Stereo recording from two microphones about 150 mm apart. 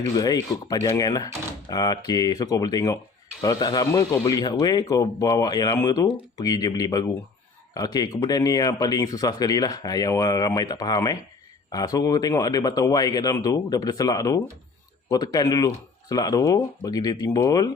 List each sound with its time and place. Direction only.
0.1 s speech: 25° left (ahead or behind)